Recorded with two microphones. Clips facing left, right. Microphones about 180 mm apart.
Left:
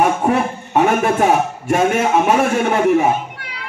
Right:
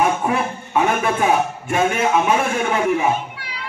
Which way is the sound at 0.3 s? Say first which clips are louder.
Left 4 dB; 45° left (ahead or behind).